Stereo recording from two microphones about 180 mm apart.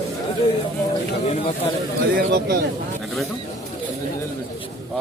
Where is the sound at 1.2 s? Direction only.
35° left (ahead or behind).